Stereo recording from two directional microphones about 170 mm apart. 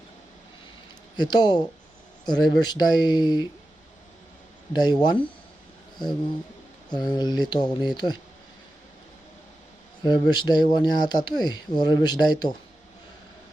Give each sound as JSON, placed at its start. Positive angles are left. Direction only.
{"t": 1.1, "sound": "speech", "side_deg": 25}
{"t": 4.7, "sound": "speech", "side_deg": 25}
{"t": 6.9, "sound": "speech", "side_deg": 25}
{"t": 10.0, "sound": "speech", "side_deg": 25}